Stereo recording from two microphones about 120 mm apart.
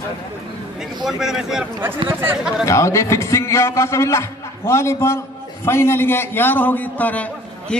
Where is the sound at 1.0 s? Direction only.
5° right (ahead or behind).